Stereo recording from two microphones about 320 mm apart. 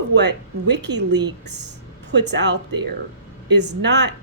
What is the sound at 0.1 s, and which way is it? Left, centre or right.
Speech, right.